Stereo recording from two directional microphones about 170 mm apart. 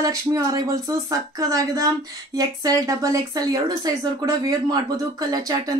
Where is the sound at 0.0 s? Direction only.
20° right (ahead or behind).